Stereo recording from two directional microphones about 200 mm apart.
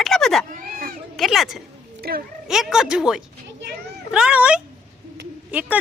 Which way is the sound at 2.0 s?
50° right (ahead or behind).